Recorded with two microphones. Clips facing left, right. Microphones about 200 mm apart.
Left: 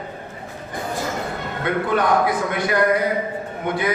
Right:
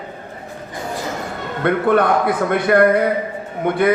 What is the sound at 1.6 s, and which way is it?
A man's voice, 60° right (ahead or behind).